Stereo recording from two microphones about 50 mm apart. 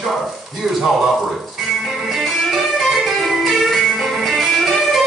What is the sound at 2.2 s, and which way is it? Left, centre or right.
Music, centre.